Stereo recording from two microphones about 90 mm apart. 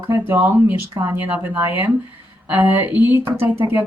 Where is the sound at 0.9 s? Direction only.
25° right (ahead or behind).